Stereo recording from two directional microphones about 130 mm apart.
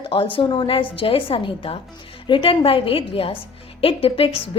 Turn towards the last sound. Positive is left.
turn(degrees=45)  # may be behind; listen again after turning